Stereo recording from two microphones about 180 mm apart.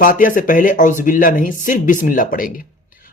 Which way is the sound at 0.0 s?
50° left (ahead or behind).